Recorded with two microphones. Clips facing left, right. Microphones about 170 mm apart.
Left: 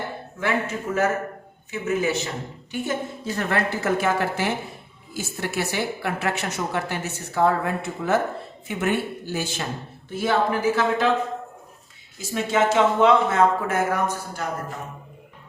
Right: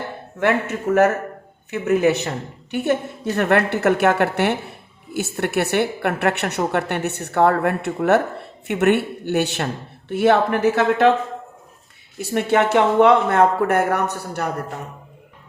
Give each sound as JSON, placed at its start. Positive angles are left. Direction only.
{"t": 0.3, "sound": "a woman's voice", "side_deg": -65}
{"t": 12.1, "sound": "a woman's voice", "side_deg": -65}